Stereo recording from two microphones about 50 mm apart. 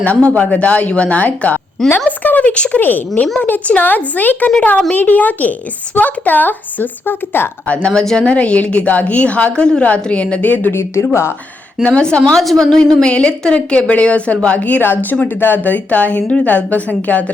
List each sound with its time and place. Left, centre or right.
0.0 s a woman's voice: left
2.8 s a woman's voice: left
7.9 s speech: centre
8.3 s a woman's voice: left
10.4 s a woman's voice: left
10.7 s speech: left
11.8 s a woman's voice: left
15.4 s a woman's voice: left